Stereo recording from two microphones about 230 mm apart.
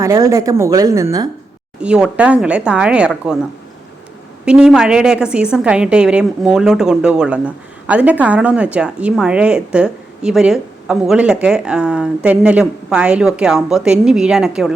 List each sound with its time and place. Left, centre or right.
0.0 s a woman's voice: centre
4.4 s a woman's voice: centre